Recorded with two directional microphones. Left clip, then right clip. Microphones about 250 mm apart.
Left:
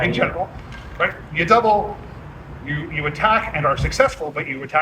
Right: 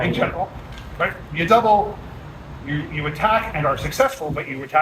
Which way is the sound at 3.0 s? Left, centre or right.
Left.